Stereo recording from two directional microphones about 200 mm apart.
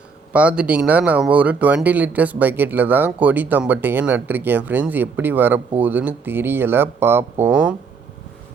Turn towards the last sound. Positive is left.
turn(degrees=-10)  # may be behind; listen again after turning